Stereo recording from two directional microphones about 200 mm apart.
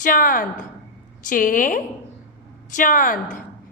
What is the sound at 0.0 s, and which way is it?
A woman's voice, 45° left (ahead or behind).